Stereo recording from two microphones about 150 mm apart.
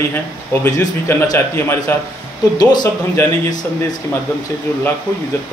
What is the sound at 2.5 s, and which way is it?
Speech, 25° left (ahead or behind).